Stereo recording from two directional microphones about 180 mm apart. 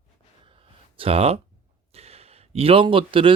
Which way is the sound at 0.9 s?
30° right (ahead or behind).